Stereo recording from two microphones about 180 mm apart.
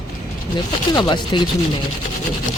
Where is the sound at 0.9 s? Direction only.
25° left (ahead or behind).